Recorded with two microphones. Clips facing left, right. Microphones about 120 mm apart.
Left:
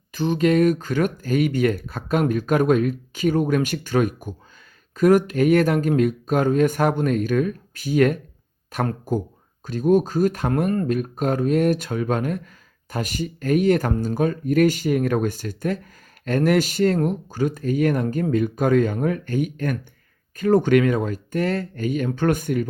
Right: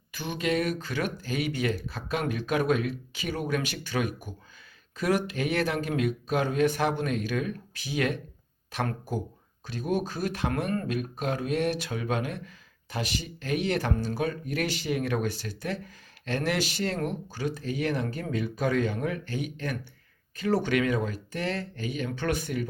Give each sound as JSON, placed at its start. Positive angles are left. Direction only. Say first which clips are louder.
{"t": 0.1, "sound": "speech", "louder": "left 10 dB", "side_deg": 40}
{"t": 9.6, "sound": "speech", "louder": "left 11 dB", "side_deg": 45}